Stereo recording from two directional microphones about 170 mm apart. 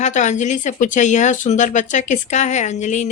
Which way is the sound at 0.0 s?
45° left (ahead or behind).